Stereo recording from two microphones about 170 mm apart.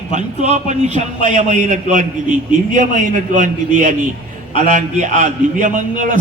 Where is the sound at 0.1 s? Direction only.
45° right (ahead or behind).